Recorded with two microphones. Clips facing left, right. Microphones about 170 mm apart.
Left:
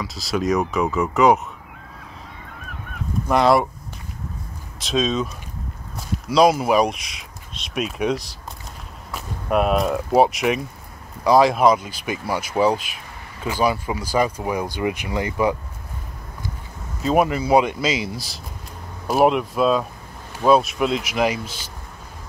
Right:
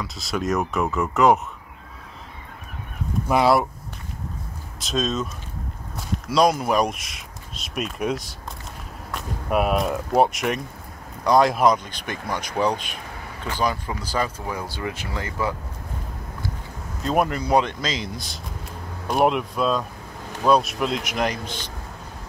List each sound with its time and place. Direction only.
0.0 s speech: centre (ahead or behind)
3.3 s speech: 5° right (ahead or behind)
4.7 s speech: centre (ahead or behind); by 15.5 s 15° left (ahead or behind)
17.0 s speech: 5° left (ahead or behind)